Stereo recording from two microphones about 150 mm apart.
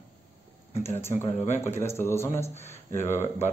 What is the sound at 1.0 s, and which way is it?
Speech, 15° left (ahead or behind).